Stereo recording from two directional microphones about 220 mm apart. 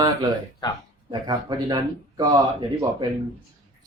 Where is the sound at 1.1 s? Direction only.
20° right (ahead or behind).